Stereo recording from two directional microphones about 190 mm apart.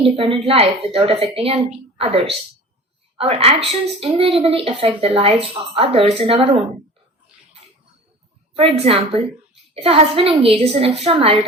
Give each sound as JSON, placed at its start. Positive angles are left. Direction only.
{"t": 0.0, "sound": "a woman's voice", "side_deg": -30}
{"t": 8.5, "sound": "a woman's voice", "side_deg": -30}